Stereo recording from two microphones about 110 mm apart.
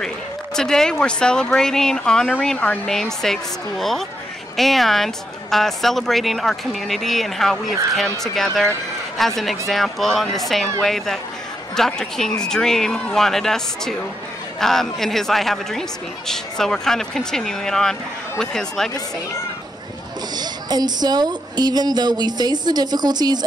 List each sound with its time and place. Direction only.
0.6 s speech: 5° left (ahead or behind)
20.3 s a woman's voice: 40° right (ahead or behind)